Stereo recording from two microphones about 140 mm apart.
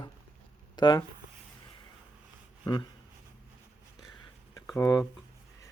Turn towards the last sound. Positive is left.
turn(degrees=20)  # may be behind; listen again after turning